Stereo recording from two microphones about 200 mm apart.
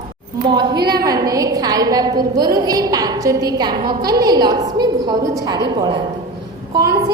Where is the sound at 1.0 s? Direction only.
20° right (ahead or behind).